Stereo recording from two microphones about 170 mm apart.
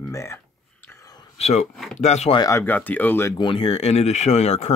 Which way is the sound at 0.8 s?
20° left (ahead or behind).